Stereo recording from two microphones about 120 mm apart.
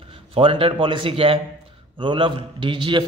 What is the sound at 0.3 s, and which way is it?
A man's voice, 50° right (ahead or behind).